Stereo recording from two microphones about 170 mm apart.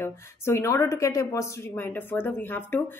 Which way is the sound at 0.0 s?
15° left (ahead or behind).